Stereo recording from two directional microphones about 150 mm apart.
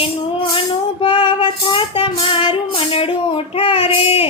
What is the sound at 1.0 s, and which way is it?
Child singing, 35° left (ahead or behind).